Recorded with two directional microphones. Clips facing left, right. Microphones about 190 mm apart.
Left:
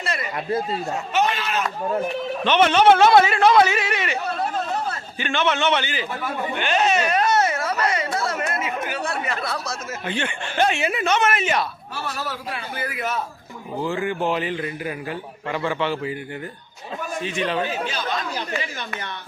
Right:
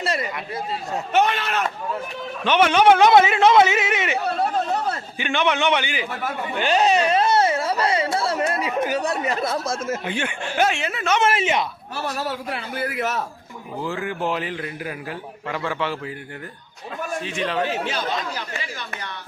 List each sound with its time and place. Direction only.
0.0 s a sound: 35° right (ahead or behind)
1.1 s speech: 60° right (ahead or behind)
2.4 s a man's voice: 10° right (ahead or behind)
6.6 s a sound: 35° right (ahead or behind)
9.6 s speech: 50° right (ahead or behind)
10.1 s a man's voice: 10° right (ahead or behind)
10.8 s a man's voice: 10° left (ahead or behind)
11.2 s speech: 25° right (ahead or behind)
13.7 s a man's voice: centre (ahead or behind)
17.2 s a man's voice: centre (ahead or behind)
17.7 s speech: 65° right (ahead or behind)